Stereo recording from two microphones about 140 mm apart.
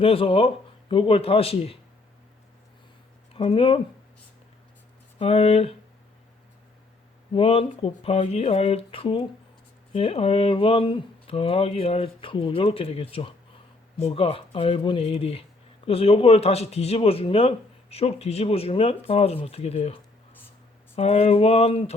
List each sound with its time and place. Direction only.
0.0 s speech: 40° left (ahead or behind)
3.3 s speech: 40° left (ahead or behind)
5.2 s speech: 45° left (ahead or behind)
7.3 s speech: 40° left (ahead or behind)